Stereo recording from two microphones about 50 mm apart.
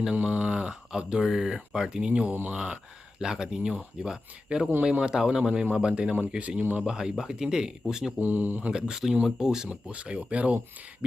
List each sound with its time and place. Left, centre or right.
0.2 s speech: right
2.3 s speech: right
3.2 s speech: centre
6.6 s speech: right
6.8 s speech: centre
8.2 s speech: right
8.7 s speech: centre
9.6 s speech: right